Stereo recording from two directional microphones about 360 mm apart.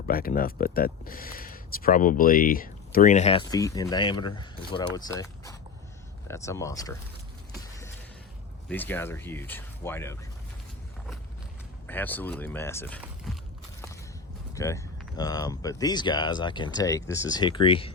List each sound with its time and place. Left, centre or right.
0.1 s speech: left; by 6.9 s centre
8.7 s speech: centre
11.9 s speech: centre
14.5 s speech: centre